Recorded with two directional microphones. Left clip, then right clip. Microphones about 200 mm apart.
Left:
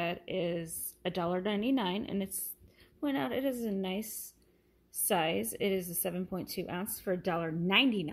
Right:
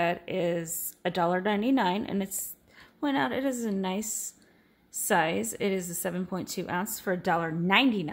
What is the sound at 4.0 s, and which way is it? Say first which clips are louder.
Speech: right 7 dB; 35° right (ahead or behind).